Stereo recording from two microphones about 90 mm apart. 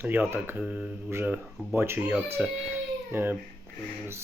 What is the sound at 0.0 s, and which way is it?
Speech, 25° right (ahead or behind).